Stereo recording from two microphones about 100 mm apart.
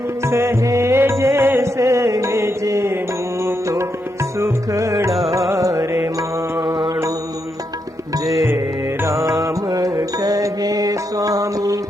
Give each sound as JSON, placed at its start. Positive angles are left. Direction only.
{"t": 0.3, "sound": "music", "side_deg": -25}
{"t": 6.6, "sound": "music", "side_deg": -50}
{"t": 9.3, "sound": "music", "side_deg": -35}